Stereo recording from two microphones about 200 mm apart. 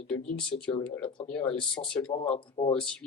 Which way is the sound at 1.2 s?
25° left (ahead or behind).